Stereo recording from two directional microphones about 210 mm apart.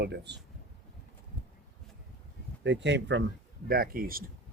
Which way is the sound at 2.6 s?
60° right (ahead or behind).